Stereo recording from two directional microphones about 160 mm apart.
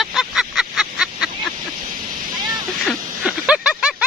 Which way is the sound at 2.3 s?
25° right (ahead or behind).